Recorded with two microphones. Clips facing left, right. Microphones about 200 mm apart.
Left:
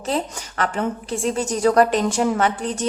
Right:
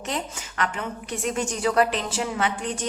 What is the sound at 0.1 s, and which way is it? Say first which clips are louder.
A woman's voice: left 7 dB; 35° left (ahead or behind).